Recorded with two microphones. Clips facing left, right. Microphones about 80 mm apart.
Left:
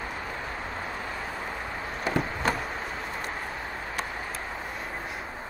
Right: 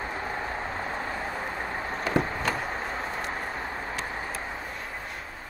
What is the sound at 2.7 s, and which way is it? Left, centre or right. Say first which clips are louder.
Vehicle: right 2 dB; right.